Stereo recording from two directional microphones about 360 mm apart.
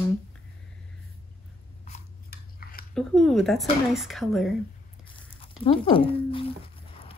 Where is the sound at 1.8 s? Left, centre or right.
Left.